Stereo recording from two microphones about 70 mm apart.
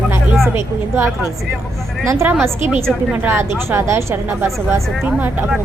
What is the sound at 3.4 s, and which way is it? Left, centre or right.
Speech, right.